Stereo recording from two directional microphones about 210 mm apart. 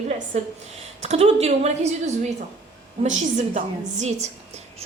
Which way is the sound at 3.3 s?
35° right (ahead or behind).